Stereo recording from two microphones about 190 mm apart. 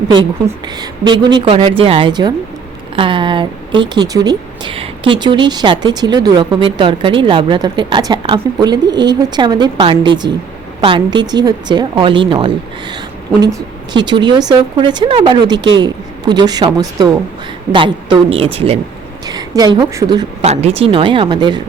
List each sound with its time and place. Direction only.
0.1 s speech: 20° right (ahead or behind)
20.4 s speech: 35° right (ahead or behind)